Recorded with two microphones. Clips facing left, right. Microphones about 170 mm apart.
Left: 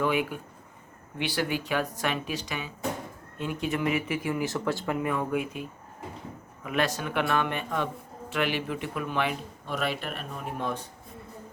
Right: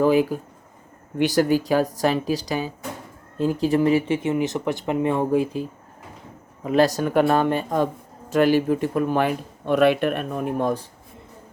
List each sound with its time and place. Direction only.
0.0 s speech: 35° right (ahead or behind)
9.6 s speech: 60° right (ahead or behind)